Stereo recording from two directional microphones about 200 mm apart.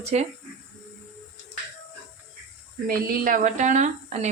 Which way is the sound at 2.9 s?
45° right (ahead or behind).